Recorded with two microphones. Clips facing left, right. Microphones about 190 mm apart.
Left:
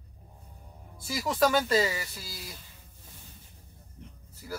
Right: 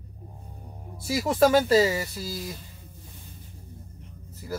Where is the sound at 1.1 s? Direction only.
40° right (ahead or behind).